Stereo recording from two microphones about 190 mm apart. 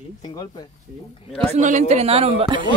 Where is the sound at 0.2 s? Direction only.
20° left (ahead or behind).